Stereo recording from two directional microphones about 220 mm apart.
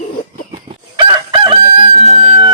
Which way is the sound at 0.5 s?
25° right (ahead or behind).